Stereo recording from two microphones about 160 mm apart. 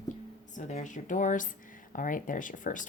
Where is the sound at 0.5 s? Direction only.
50° left (ahead or behind).